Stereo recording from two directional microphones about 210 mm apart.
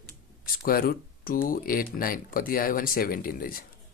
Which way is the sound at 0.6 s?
45° left (ahead or behind).